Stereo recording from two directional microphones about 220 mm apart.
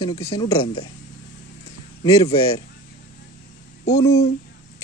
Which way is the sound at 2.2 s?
30° left (ahead or behind).